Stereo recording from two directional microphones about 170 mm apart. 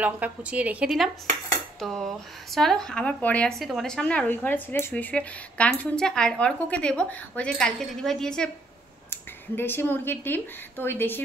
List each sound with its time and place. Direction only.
0.0 s speech: 10° right (ahead or behind); by 11.2 s 10° left (ahead or behind)